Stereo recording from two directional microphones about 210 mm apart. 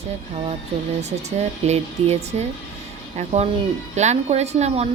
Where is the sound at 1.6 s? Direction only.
30° right (ahead or behind).